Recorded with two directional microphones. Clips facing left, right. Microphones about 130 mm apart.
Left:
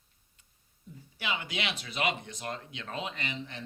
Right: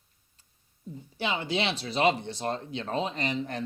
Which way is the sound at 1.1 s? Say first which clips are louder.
Right 6 dB; 30° right (ahead or behind).